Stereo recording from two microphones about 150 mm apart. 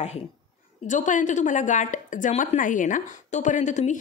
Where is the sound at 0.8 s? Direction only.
55° left (ahead or behind).